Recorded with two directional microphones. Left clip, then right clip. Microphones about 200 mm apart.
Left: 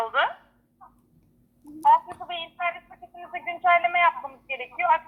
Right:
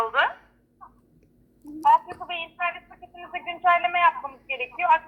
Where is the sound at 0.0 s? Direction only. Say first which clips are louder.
Right 1 dB; 15° right (ahead or behind).